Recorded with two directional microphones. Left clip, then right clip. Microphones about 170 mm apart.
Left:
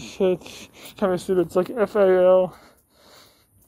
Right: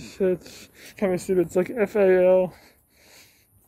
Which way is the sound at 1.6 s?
15° right (ahead or behind).